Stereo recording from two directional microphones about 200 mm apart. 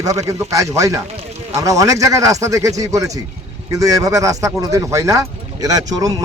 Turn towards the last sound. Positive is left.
turn(degrees=-20)  # may be behind; listen again after turning